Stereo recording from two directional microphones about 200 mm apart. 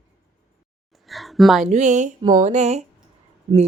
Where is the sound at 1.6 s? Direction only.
35° right (ahead or behind).